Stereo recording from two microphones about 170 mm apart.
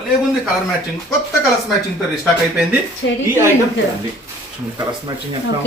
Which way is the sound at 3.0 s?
90° left.